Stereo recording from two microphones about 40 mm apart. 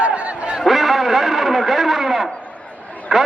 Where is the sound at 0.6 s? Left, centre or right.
Centre.